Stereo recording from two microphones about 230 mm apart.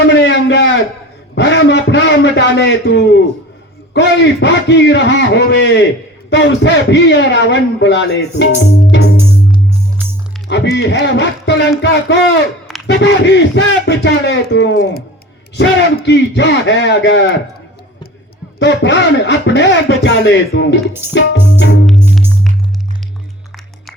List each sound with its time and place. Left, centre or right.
0.1 s a sound: left
1.4 s a man's voice: left
10.0 s music: centre
10.5 s a man's voice: left
16.0 s a man's voice: left
18.6 s a man's voice: left